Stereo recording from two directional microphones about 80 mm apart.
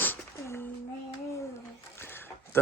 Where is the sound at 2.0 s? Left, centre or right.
Left.